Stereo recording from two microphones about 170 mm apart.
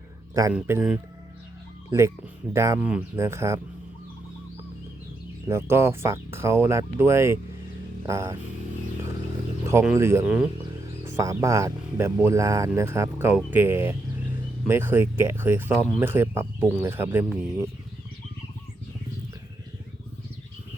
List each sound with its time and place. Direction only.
0.5 s speech: 5° right (ahead or behind)
5.5 s speech: 15° right (ahead or behind)
9.8 s speech: 15° right (ahead or behind)